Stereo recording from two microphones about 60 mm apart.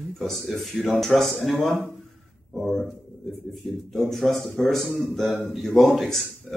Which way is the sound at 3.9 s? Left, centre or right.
Centre.